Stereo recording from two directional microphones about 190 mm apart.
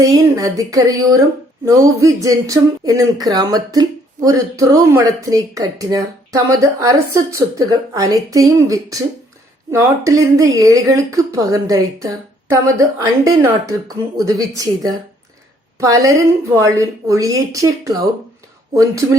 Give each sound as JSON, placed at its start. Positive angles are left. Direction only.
{"t": 0.0, "sound": "speech", "side_deg": -15}